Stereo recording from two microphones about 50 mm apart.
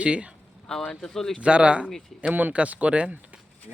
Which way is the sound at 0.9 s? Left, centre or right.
Centre.